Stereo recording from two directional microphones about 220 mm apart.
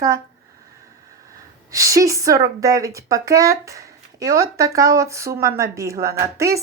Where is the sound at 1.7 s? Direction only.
15° right (ahead or behind).